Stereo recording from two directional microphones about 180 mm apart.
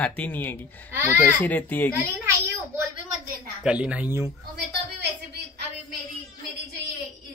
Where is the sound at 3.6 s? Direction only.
5° right (ahead or behind).